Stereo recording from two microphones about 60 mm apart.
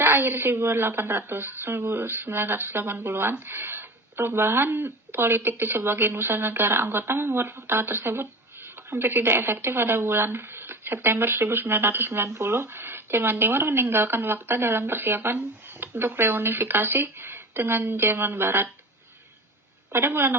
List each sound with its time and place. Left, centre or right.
0.0 s a woman's voice: right
19.9 s a woman's voice: right